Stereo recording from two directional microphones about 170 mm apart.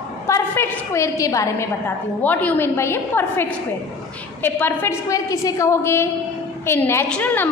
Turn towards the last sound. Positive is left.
turn(degrees=10)  # may be behind; listen again after turning